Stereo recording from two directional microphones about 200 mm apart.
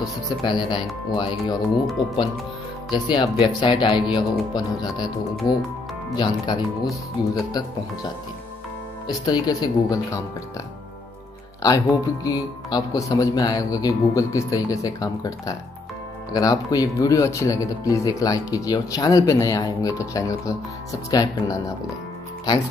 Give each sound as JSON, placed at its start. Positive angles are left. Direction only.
{"t": 0.0, "sound": "speech", "side_deg": 20}
{"t": 2.9, "sound": "speech", "side_deg": 20}
{"t": 9.0, "sound": "speech", "side_deg": 20}
{"t": 11.6, "sound": "speech", "side_deg": 20}